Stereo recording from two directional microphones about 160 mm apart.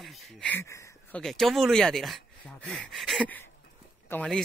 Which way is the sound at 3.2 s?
10° left (ahead or behind).